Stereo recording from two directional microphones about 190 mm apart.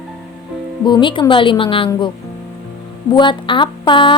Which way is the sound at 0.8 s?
25° left (ahead or behind).